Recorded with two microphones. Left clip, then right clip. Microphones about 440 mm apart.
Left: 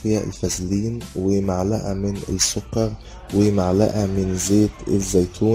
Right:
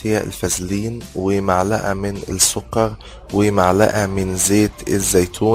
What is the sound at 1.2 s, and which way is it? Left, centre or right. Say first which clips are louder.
Speech: right 5 dB; right.